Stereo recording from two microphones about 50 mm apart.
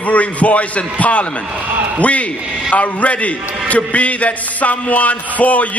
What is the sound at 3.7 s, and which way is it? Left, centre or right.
Music, left.